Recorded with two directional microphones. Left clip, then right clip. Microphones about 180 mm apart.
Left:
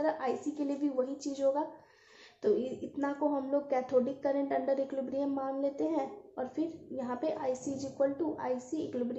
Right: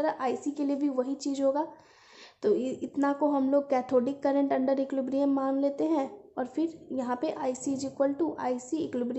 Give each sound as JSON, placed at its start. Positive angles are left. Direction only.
{"t": 0.0, "sound": "a woman's voice", "side_deg": -40}